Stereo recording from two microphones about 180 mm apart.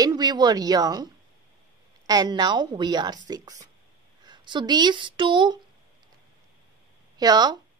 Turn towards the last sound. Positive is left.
turn(degrees=-20)  # may be behind; listen again after turning